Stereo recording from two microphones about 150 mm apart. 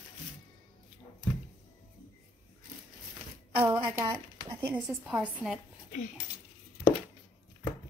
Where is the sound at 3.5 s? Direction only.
10° right (ahead or behind).